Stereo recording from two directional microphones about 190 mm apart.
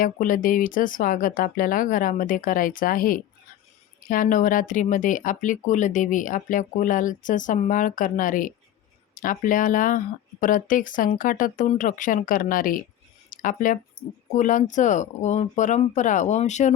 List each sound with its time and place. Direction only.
0.0 s speech: 45° left (ahead or behind)